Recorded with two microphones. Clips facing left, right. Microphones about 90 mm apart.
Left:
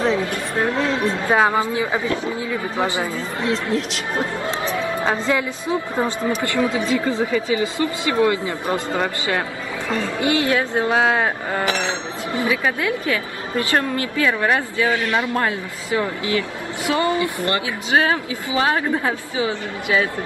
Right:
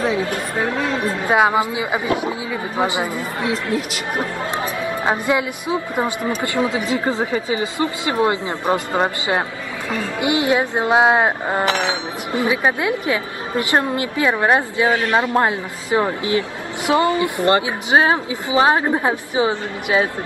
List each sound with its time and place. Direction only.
1.2 s speech: 15° right (ahead or behind)
4.6 s music: 25° left (ahead or behind)
5.0 s a woman's voice: 15° right (ahead or behind)